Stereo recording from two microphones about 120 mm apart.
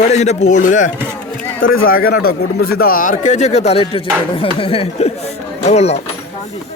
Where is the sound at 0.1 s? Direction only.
70° left (ahead or behind); by 0.9 s 90° left.